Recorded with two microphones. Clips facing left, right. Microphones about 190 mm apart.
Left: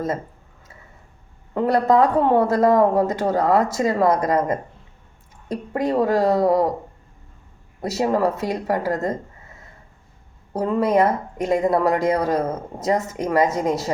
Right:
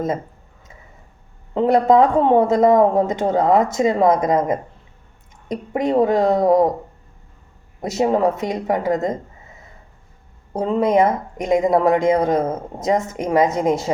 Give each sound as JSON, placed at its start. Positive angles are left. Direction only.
{"t": 1.5, "sound": "a woman's voice", "side_deg": -20}
{"t": 7.8, "sound": "a woman's voice", "side_deg": -20}
{"t": 10.5, "sound": "a woman's voice", "side_deg": -20}